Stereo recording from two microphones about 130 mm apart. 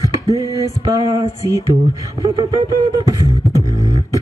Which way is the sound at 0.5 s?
25° right (ahead or behind).